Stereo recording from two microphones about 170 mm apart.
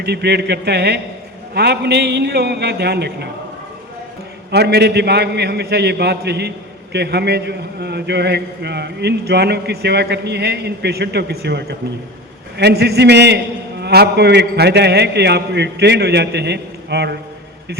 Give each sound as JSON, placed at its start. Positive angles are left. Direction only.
{"t": 0.0, "sound": "a man's voice", "side_deg": -75}
{"t": 4.5, "sound": "a man's voice", "side_deg": -80}